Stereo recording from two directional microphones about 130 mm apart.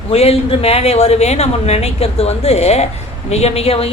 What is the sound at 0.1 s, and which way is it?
Speech, 50° left (ahead or behind).